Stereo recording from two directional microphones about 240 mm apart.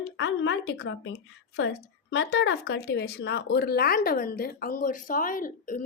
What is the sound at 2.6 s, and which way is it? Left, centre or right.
Speech, left.